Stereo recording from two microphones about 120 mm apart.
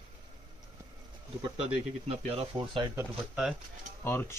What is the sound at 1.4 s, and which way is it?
Speech, 50° right (ahead or behind).